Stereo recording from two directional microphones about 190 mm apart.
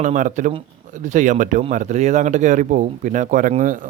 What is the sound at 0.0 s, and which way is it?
Speech, 40° right (ahead or behind).